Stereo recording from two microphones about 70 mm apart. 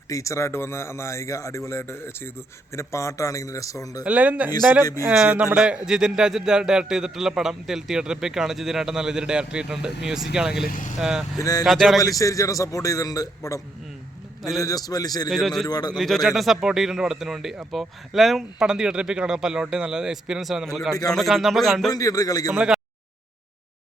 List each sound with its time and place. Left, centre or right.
0.1 s a man's voice: left
4.0 s speech: centre
4.8 s a man's voice: left
5.0 s a man's voice: centre
11.3 s a man's voice: left
11.6 s a man's voice: centre
11.9 s a man's voice: left
14.6 s a man's voice: left
15.3 s a man's voice: centre
15.6 s a man's voice: left
16.0 s a man's voice: centre
20.7 s a man's voice: centre
21.9 s a man's voice: left
22.5 s speech: centre